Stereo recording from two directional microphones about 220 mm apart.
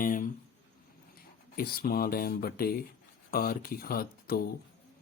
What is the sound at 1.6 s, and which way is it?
Speech, 40° left (ahead or behind).